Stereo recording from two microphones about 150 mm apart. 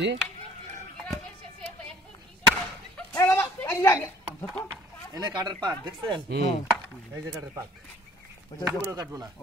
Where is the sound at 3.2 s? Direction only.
10° left (ahead or behind).